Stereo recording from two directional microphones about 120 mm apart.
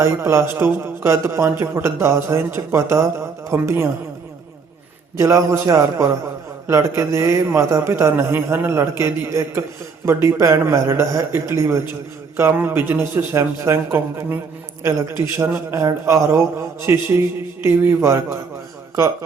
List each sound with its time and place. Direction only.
0.0 s a man's voice: 25° right (ahead or behind)
5.1 s a man's voice: 25° right (ahead or behind)